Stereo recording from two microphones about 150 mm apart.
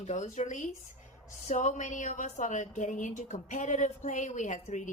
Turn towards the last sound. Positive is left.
turn(degrees=55)  # may be behind; listen again after turning